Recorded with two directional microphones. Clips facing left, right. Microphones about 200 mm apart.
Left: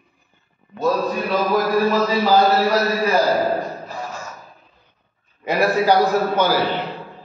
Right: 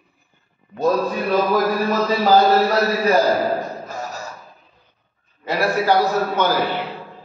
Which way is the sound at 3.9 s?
40° right (ahead or behind).